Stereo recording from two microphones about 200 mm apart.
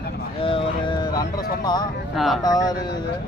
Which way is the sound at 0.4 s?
25° left (ahead or behind).